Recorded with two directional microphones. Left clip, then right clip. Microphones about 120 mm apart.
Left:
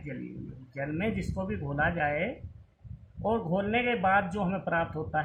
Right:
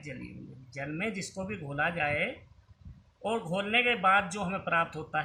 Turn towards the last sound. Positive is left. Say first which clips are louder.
# even
turn(degrees=-65)  # may be behind; listen again after turning